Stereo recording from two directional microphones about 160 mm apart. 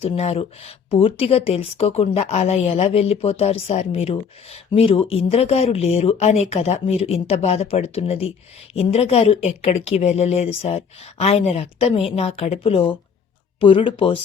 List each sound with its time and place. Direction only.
0.0 s speech: 40° left (ahead or behind)